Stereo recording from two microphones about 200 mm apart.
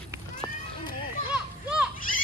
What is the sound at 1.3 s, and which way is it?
Children playing, 5° right (ahead or behind).